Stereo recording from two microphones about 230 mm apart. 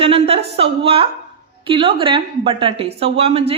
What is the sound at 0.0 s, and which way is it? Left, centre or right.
A woman's voice, right.